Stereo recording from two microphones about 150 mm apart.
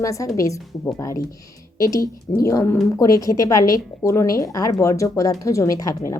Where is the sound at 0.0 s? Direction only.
20° left (ahead or behind).